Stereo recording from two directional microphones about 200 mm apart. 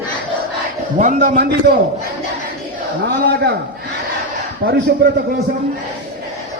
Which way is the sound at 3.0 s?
55° right (ahead or behind).